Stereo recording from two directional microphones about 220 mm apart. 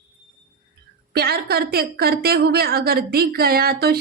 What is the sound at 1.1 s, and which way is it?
A woman's voice, 45° right (ahead or behind).